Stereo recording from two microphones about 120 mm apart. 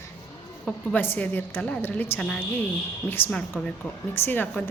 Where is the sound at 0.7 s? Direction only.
15° left (ahead or behind).